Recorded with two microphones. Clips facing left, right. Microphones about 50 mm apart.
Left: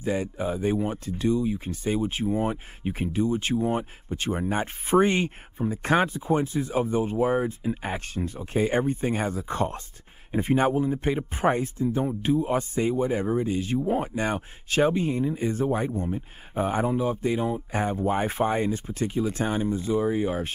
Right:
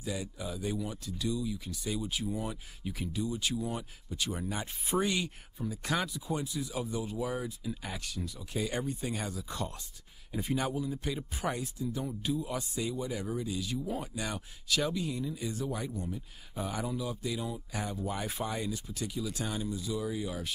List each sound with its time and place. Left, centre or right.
0.0 s speech: left